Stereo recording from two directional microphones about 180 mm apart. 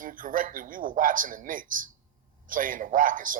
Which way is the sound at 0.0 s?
50° right (ahead or behind).